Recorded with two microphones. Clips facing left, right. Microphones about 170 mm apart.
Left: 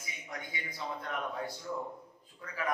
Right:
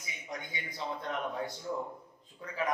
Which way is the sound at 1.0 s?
25° right (ahead or behind).